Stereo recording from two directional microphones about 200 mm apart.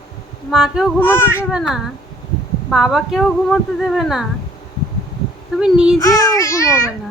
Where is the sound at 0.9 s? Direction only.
10° left (ahead or behind).